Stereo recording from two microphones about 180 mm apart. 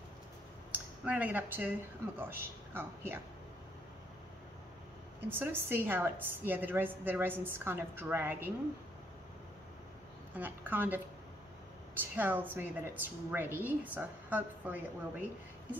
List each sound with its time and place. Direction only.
0.7 s a woman's voice: 5° right (ahead or behind)
5.3 s a woman's voice: 10° right (ahead or behind)
10.3 s a woman's voice: 10° right (ahead or behind)
12.0 s a woman's voice: 10° right (ahead or behind)